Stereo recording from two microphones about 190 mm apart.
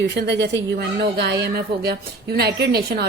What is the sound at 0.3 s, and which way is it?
Speech, 60° right (ahead or behind).